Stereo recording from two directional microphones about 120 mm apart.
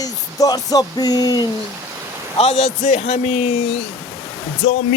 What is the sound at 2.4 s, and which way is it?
A man's voice, 65° left (ahead or behind).